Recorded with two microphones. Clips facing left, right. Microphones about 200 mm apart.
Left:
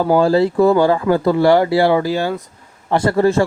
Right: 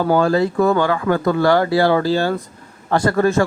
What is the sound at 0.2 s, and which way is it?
Speech, 30° left (ahead or behind).